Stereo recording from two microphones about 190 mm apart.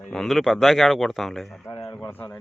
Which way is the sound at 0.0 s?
5° left (ahead or behind).